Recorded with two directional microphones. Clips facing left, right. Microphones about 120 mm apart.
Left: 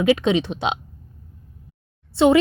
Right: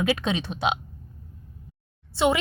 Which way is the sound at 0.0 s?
20° left (ahead or behind).